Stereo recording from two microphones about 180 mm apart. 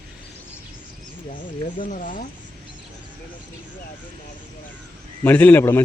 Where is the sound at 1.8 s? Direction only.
45° left (ahead or behind).